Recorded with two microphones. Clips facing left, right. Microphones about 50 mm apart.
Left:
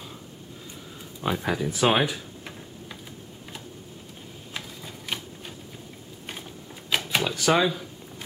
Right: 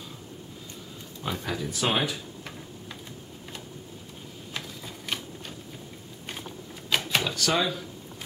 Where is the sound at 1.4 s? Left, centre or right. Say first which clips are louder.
Left 6 dB; centre.